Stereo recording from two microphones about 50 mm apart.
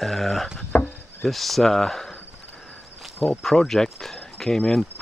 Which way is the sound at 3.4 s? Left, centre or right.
Centre.